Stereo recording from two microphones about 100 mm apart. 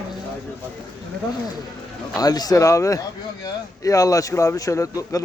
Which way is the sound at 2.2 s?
40° left (ahead or behind).